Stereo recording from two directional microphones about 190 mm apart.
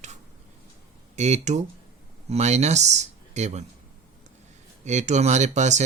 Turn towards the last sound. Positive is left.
turn(degrees=-40)  # may be behind; listen again after turning